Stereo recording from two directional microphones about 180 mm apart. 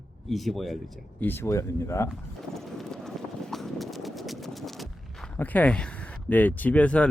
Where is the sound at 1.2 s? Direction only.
10° left (ahead or behind).